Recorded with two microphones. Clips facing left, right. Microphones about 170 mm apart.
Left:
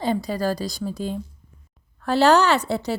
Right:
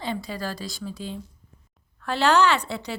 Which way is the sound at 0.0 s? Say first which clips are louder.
Left 7 dB; 40° left (ahead or behind).